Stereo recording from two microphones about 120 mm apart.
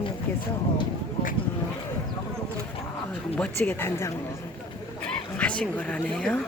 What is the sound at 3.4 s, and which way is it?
Speech, 10° left (ahead or behind).